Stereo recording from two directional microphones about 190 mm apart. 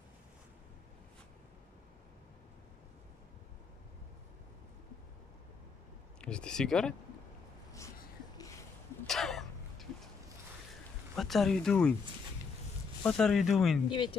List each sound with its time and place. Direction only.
6.2 s speech: 5° left (ahead or behind)
9.0 s throat clearing: centre (ahead or behind)
11.1 s speech: centre (ahead or behind)
13.0 s speech: 5° left (ahead or behind)
13.8 s speech: 25° left (ahead or behind)